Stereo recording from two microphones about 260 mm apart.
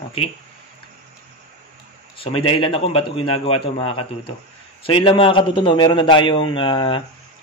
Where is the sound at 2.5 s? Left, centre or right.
Centre.